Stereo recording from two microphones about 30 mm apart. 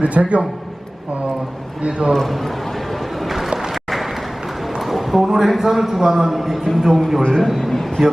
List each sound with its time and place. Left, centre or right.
0.0 s a man's voice: right
2.0 s a man's voice: right
3.2 s a sound: centre
4.8 s a man's voice: centre
7.2 s a man's voice: centre
7.4 s a man's voice: centre